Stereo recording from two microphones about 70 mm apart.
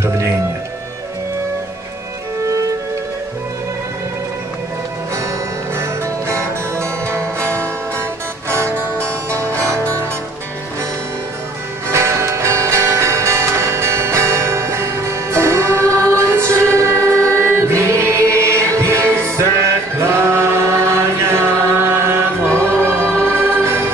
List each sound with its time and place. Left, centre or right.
5.8 s music: right
11.9 s music: right
16.9 s choir: left
17.7 s music: right